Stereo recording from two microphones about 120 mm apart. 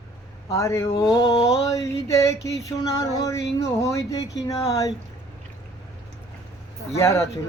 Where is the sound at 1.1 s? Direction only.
35° left (ahead or behind).